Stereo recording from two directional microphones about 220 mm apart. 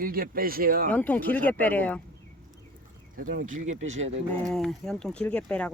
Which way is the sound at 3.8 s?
30° right (ahead or behind).